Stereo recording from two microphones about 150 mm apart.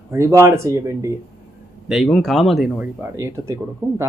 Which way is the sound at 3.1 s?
20° right (ahead or behind).